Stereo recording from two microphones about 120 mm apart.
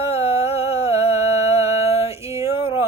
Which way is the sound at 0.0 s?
55° left (ahead or behind).